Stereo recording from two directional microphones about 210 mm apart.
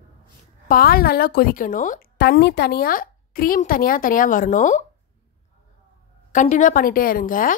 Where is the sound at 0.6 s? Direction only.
45° left (ahead or behind).